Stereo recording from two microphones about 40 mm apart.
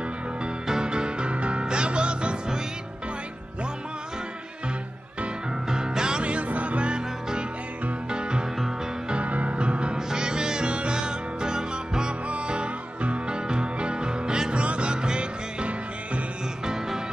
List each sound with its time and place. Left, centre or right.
0.7 s music: centre
5.7 s music: centre
8.1 s music: right
9.1 s music: right
9.9 s music: centre
12.3 s music: right
16.6 s music: centre